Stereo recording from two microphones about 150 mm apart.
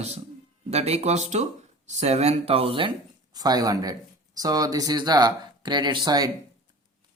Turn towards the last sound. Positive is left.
turn(degrees=-25)  # may be behind; listen again after turning